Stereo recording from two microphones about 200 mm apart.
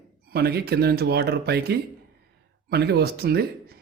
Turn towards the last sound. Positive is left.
turn(degrees=-50)  # may be behind; listen again after turning